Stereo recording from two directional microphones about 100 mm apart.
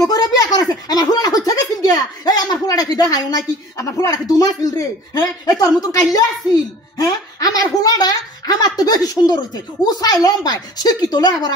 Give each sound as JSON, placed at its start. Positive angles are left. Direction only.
{"t": 0.0, "sound": "a woman's voice", "side_deg": 40}